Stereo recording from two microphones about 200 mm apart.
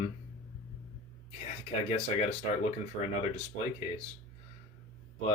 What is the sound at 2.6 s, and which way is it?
Speech, 35° left (ahead or behind).